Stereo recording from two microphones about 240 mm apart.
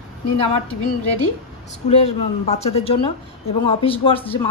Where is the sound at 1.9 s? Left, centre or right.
Left.